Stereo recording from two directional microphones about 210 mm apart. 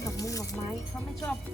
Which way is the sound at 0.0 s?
15° left (ahead or behind).